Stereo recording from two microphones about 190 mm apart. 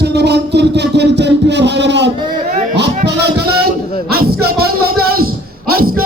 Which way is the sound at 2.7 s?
65° right (ahead or behind).